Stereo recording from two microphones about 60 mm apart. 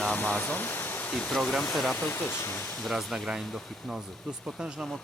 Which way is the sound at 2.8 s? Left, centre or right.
Centre.